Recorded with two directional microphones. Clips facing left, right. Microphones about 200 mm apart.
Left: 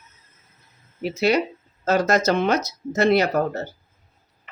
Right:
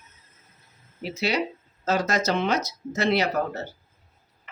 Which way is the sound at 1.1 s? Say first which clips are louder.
Left 6 dB; 50° left (ahead or behind).